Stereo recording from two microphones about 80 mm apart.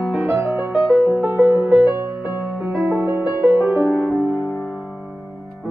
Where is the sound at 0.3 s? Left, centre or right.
Right.